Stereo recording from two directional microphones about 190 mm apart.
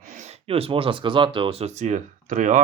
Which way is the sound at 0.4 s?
30° right (ahead or behind).